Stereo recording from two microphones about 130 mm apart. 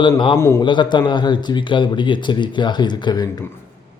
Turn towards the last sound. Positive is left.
turn(degrees=35)  # may be behind; listen again after turning